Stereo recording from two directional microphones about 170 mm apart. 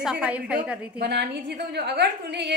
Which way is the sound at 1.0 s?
75° right (ahead or behind).